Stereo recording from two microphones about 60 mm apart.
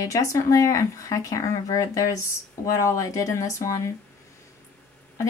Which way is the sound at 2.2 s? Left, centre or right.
Left.